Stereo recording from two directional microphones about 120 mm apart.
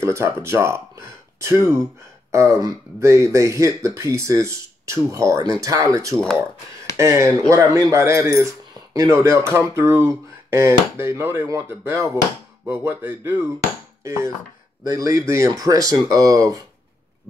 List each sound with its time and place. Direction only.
0.0 s speech: 20° right (ahead or behind)